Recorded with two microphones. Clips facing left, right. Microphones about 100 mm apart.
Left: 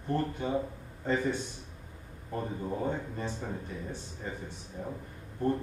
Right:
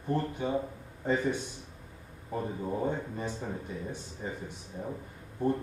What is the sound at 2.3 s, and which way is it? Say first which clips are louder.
Speech: right 1 dB; 10° right (ahead or behind).